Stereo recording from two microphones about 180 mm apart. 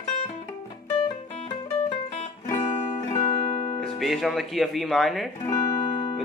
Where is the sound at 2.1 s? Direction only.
40° left (ahead or behind).